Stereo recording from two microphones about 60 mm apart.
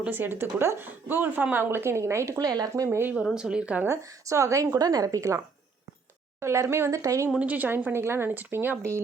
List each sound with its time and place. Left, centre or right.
0.1 s a woman's voice: right
1.0 s a woman's voice: right
2.4 s speech: right
3.3 s speech: centre
3.8 s a woman's voice: right
6.4 s speech: right
6.9 s a woman's voice: right
7.3 s a woman's voice: right
7.9 s speech: right
8.3 s a woman's voice: right